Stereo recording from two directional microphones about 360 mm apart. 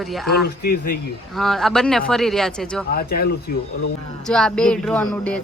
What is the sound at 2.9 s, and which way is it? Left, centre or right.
Speech, left.